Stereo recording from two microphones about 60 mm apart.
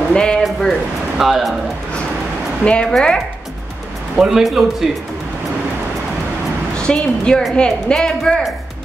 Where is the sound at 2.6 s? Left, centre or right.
Centre.